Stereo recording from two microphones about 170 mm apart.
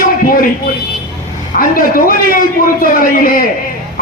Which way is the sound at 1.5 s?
55° left (ahead or behind).